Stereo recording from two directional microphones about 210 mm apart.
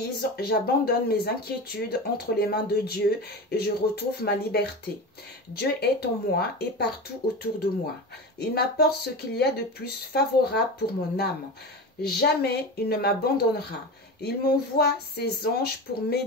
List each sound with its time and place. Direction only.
0.0 s speech: 50° left (ahead or behind)
8.4 s speech: 50° left (ahead or behind)